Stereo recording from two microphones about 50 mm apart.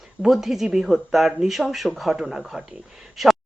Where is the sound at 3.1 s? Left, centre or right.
Centre.